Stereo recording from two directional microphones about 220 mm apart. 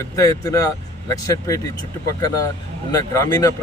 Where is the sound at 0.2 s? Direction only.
15° left (ahead or behind).